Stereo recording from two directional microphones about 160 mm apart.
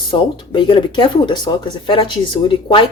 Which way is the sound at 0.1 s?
30° left (ahead or behind).